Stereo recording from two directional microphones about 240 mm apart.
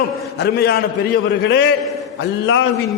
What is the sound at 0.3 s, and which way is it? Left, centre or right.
A man's voice, left.